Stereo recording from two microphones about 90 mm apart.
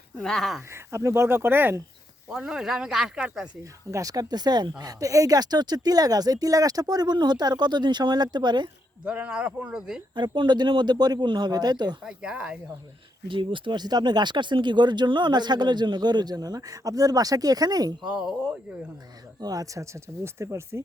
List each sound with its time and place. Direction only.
0.2 s speech: 5° left (ahead or behind)
0.7 s speech: 30° right (ahead or behind)
2.4 s speech: 5° right (ahead or behind)
3.6 s speech: 40° right (ahead or behind); by 8.7 s 55° right (ahead or behind)
9.0 s speech: 15° right (ahead or behind)
10.2 s speech: 55° right (ahead or behind)
12.0 s speech: 10° right (ahead or behind)
13.2 s speech: 65° right (ahead or behind); by 18.1 s 45° right (ahead or behind)
18.1 s speech: 10° right (ahead or behind)
19.4 s speech: 45° right (ahead or behind)